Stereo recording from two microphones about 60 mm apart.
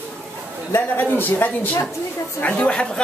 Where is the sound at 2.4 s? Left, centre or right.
Centre.